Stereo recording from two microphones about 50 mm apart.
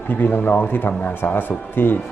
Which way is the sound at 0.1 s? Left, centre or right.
Left.